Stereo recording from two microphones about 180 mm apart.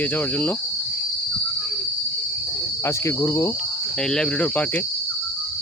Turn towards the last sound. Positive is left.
turn(degrees=10)  # may be behind; listen again after turning